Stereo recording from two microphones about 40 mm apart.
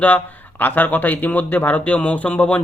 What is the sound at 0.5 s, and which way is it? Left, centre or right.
Speech, left.